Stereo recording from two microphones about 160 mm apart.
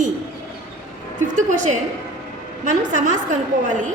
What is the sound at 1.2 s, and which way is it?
A woman's voice, 50° right (ahead or behind).